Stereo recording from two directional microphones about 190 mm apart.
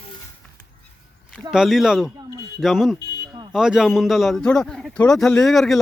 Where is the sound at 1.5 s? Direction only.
Centre (ahead or behind).